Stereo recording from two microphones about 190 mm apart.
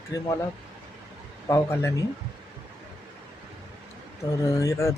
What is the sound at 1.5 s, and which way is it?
Speech, 15° left (ahead or behind).